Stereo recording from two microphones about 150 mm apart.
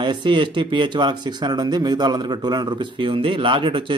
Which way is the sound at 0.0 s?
30° right (ahead or behind).